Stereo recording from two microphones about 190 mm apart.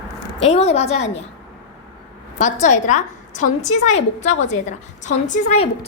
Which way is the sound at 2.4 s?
40° left (ahead or behind).